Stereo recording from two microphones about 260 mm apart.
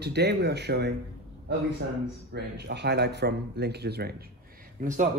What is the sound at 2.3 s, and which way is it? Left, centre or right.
Speech, right.